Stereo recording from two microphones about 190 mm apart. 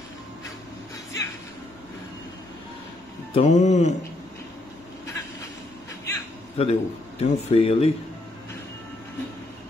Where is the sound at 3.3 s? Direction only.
40° left (ahead or behind).